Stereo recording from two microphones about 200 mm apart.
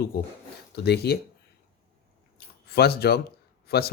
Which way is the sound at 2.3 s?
50° left (ahead or behind).